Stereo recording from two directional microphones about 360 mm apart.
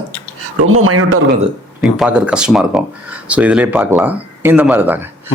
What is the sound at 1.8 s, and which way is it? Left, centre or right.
Speech, centre.